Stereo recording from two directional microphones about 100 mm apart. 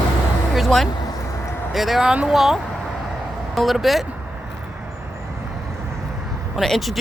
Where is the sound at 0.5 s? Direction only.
Centre (ahead or behind).